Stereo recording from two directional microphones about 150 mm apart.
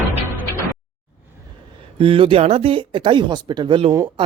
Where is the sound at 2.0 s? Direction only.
35° right (ahead or behind).